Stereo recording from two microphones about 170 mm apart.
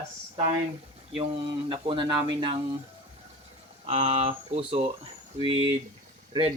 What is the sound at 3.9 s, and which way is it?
Speech, 40° right (ahead or behind).